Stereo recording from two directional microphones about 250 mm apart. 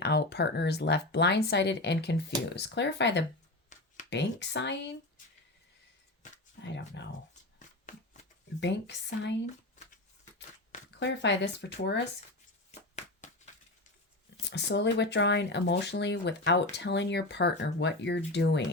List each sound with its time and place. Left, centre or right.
0.0 s speech: left
3.7 s a sound: left
4.1 s speech: left
6.6 s speech: left
7.9 s shuffling cards: left
8.6 s speech: left
11.0 s speech: left
13.0 s a sound: left
14.4 s speech: left